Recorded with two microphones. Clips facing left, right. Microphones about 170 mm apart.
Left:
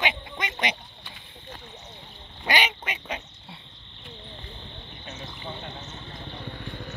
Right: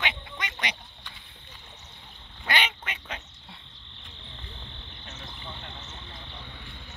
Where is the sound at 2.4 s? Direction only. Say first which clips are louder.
Left 3 dB; 15° left (ahead or behind).